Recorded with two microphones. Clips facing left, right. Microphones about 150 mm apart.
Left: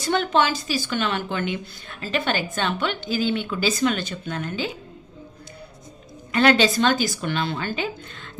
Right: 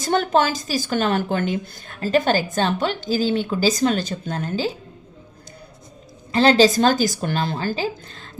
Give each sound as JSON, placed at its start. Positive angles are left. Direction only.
{"t": 0.0, "sound": "a woman's voice", "side_deg": -40}
{"t": 6.3, "sound": "a woman's voice", "side_deg": -30}
{"t": 6.7, "sound": "a woman's voice", "side_deg": -45}